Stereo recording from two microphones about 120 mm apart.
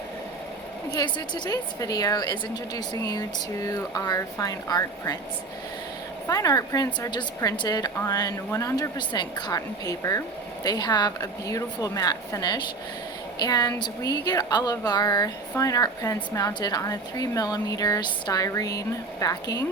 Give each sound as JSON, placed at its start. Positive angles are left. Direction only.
{"t": 0.9, "sound": "speech", "side_deg": 35}
{"t": 6.2, "sound": "speech", "side_deg": 30}